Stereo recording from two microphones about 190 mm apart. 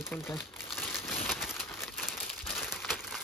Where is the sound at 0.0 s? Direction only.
15° left (ahead or behind).